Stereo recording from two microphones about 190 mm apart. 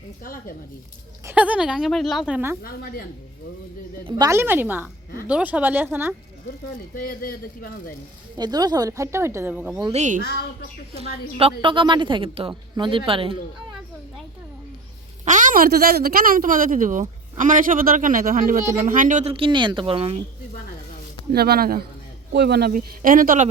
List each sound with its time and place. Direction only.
0.2 s a man's voice: 50° left (ahead or behind)
1.2 s a woman's voice: 10° right (ahead or behind)
2.6 s a man's voice: 50° left (ahead or behind)
4.0 s speech: 15° right (ahead or behind)
6.9 s a man's voice: 50° left (ahead or behind)
8.4 s speech: 20° right (ahead or behind)
9.9 s a woman's voice: 40° right (ahead or behind)
15.2 s a woman's voice: 40° right (ahead or behind)
19.3 s a woman's voice: 25° right (ahead or behind)
21.3 s a woman's voice: 55° right (ahead or behind)